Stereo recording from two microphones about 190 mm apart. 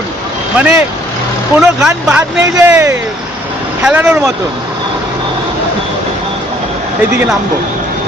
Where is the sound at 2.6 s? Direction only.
15° right (ahead or behind).